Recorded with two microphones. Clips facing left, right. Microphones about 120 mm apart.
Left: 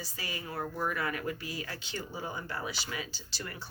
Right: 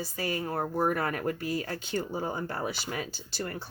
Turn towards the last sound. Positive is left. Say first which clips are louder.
# right 7 dB
turn(degrees=-50)  # may be behind; listen again after turning